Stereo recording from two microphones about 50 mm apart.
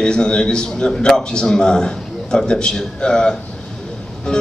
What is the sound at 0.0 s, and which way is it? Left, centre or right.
A man's voice, centre.